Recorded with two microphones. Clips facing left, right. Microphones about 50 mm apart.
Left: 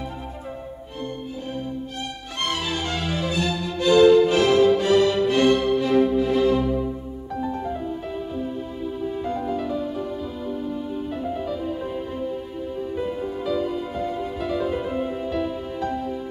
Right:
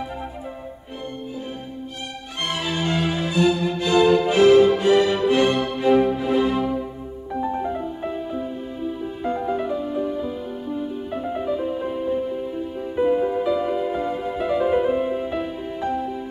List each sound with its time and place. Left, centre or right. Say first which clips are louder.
2.5 s music: right 5 dB; right
9.2 s music: right 5 dB; right
12.9 s music: right 11 dB; right